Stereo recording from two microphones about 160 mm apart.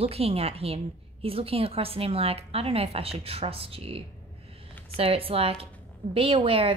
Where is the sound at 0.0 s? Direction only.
35° right (ahead or behind).